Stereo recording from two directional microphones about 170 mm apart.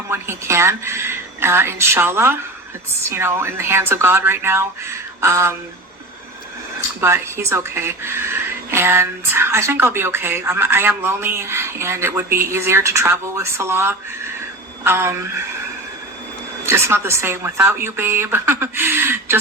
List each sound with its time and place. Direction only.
0.1 s speech: 15° right (ahead or behind)
7.0 s speech: 15° right (ahead or behind)
16.6 s speech: 15° right (ahead or behind)